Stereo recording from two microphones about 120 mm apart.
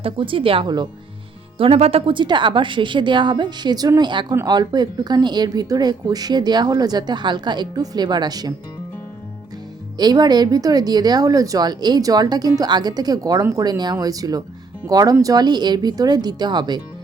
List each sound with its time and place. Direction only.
0.0 s speech: 45° right (ahead or behind)
1.5 s speech: 55° right (ahead or behind); by 8.5 s 35° right (ahead or behind)
10.0 s speech: 35° right (ahead or behind)